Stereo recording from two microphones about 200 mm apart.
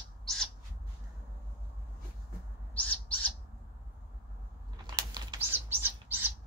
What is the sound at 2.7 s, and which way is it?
Bird, 5° left (ahead or behind).